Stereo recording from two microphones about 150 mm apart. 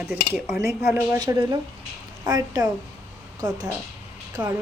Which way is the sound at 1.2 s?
25° right (ahead or behind).